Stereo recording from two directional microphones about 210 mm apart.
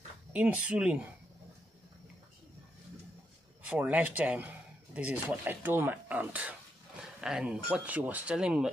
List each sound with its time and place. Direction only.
0.3 s speech: 5° right (ahead or behind)
3.6 s speech: 5° right (ahead or behind)